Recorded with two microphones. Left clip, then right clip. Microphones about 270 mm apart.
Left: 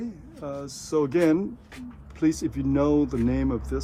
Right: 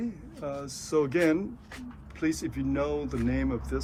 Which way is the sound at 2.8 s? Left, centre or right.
Left.